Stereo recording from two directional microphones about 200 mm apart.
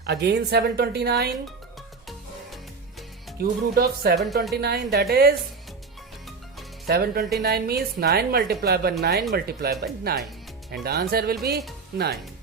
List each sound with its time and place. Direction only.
0.0 s a woman's voice: 55° right (ahead or behind)
3.4 s a woman's voice: 50° right (ahead or behind)
6.8 s a woman's voice: 50° right (ahead or behind)